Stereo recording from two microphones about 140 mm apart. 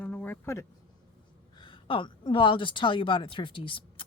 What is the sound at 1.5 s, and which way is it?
A woman's voice, 35° left (ahead or behind).